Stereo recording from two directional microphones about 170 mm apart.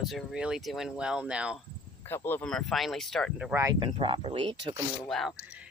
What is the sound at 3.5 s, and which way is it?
Speech, 15° right (ahead or behind).